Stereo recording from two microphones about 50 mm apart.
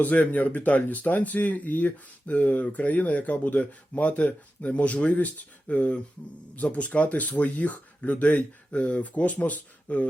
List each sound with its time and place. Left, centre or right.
0.0 s speech: left